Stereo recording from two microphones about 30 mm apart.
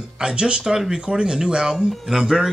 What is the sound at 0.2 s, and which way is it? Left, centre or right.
Speech, right.